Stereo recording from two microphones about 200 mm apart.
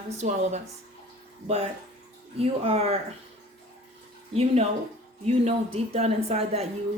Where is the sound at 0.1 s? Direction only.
35° right (ahead or behind).